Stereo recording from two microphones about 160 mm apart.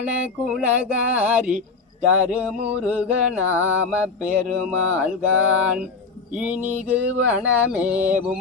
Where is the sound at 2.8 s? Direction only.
5° right (ahead or behind).